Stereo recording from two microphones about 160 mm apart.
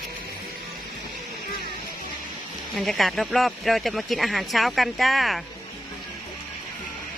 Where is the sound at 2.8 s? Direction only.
Centre (ahead or behind).